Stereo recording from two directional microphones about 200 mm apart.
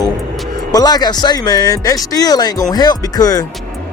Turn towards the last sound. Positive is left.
turn(degrees=20)  # may be behind; listen again after turning